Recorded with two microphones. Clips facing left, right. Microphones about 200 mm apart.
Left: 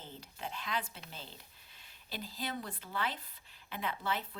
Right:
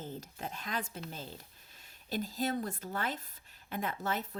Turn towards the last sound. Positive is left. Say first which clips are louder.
# right 2 dB
turn(degrees=-45)  # may be behind; listen again after turning